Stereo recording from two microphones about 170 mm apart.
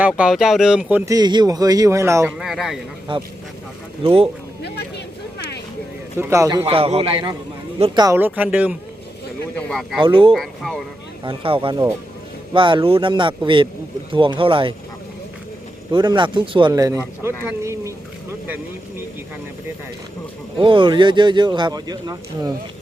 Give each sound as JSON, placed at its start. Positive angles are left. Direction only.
{"t": 0.2, "sound": "speech", "side_deg": -5}
{"t": 2.4, "sound": "speech", "side_deg": 0}
{"t": 3.1, "sound": "a man's voice", "side_deg": -30}
{"t": 4.6, "sound": "speech", "side_deg": 80}
{"t": 6.1, "sound": "speech", "side_deg": -15}
{"t": 6.7, "sound": "a man's voice", "side_deg": -35}
{"t": 8.1, "sound": "speech", "side_deg": -10}
{"t": 9.6, "sound": "speech", "side_deg": 5}
{"t": 10.0, "sound": "speech", "side_deg": -30}
{"t": 10.3, "sound": "speech", "side_deg": 0}
{"t": 11.2, "sound": "speech", "side_deg": -30}
{"t": 15.9, "sound": "speech", "side_deg": -25}
{"t": 20.6, "sound": "speech", "side_deg": -30}